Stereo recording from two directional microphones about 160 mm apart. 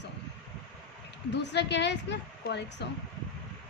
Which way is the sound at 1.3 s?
90° left.